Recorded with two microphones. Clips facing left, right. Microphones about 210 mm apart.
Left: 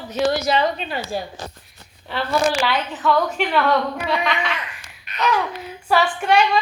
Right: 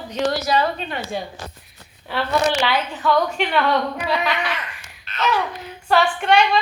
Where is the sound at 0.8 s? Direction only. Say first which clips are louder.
Left 1 dB; 5° left (ahead or behind).